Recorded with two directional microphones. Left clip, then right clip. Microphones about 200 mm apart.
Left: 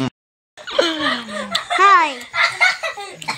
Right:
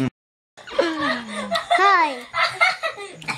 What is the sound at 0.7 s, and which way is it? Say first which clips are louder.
Laughter: left 4 dB; centre (ahead or behind).